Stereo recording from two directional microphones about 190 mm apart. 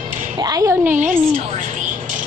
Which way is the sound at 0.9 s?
40° right (ahead or behind).